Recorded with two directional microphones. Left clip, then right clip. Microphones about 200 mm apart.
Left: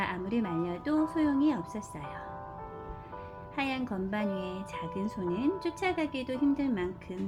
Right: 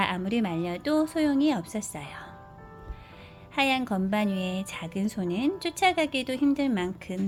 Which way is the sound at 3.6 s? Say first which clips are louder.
Right 8 dB; 55° right (ahead or behind).